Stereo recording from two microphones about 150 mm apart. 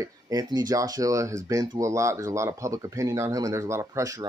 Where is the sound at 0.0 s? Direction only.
25° right (ahead or behind).